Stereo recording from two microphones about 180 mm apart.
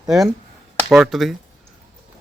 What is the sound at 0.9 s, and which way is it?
Speech, centre (ahead or behind).